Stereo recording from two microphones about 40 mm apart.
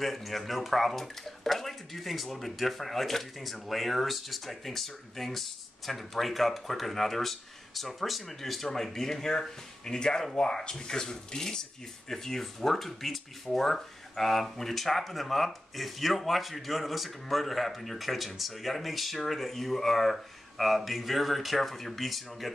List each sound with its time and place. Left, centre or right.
0.0 s speech: centre